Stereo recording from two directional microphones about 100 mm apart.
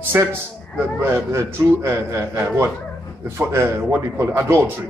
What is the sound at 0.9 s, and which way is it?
Speech, 25° right (ahead or behind).